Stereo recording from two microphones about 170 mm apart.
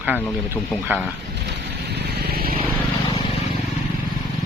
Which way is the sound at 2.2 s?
60° right (ahead or behind).